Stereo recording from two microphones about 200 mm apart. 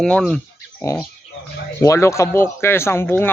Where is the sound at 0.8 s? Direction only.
15° left (ahead or behind).